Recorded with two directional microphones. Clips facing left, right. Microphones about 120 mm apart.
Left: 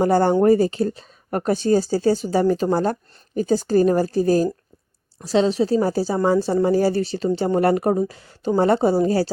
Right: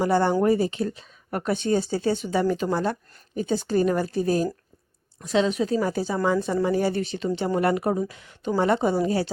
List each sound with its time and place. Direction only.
0.0 s speech: 45° left (ahead or behind)